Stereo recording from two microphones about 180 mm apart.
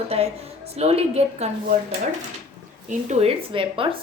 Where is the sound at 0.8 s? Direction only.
35° right (ahead or behind).